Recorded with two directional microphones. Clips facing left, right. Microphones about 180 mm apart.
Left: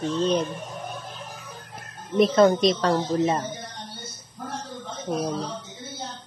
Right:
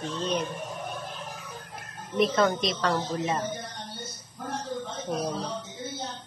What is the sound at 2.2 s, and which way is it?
Speech, 35° left (ahead or behind).